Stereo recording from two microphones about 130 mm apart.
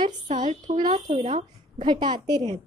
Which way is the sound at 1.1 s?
55° right (ahead or behind).